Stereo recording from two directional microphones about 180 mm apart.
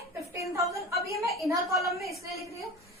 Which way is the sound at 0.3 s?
15° right (ahead or behind).